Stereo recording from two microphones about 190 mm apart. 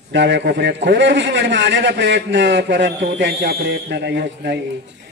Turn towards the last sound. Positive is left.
turn(degrees=-65)  # may be behind; listen again after turning